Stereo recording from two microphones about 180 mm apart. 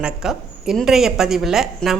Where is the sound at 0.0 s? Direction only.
Centre (ahead or behind).